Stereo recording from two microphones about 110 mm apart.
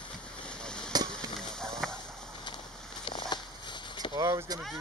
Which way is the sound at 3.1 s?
45° left (ahead or behind).